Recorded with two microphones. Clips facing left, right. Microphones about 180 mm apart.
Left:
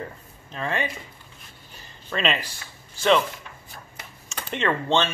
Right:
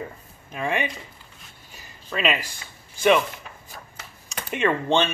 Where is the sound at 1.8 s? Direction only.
5° right (ahead or behind).